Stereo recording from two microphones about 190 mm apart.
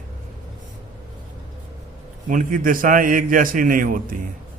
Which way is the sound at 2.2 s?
45° right (ahead or behind).